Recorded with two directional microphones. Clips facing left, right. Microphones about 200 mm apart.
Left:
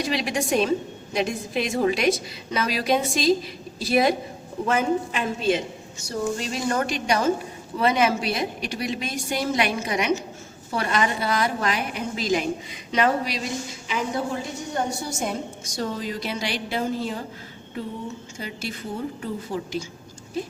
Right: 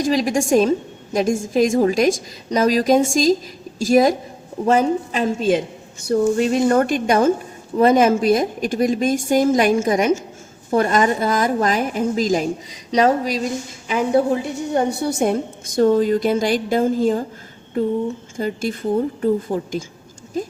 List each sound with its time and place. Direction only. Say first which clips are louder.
0.0 s a woman's voice: right 7 dB; 45° right (ahead or behind)
14.7 s a woman's voice: right 9 dB; 60° right (ahead or behind)
18.3 s a woman's voice: right 13 dB; 50° right (ahead or behind)